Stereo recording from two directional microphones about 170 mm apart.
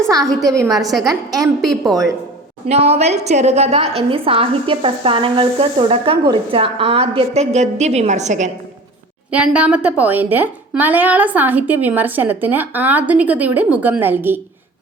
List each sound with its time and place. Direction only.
0.3 s a woman's voice: centre (ahead or behind)
0.5 s a woman's voice: 20° right (ahead or behind)
2.6 s a woman's voice: 35° right (ahead or behind)
9.3 s a woman's voice: 5° right (ahead or behind)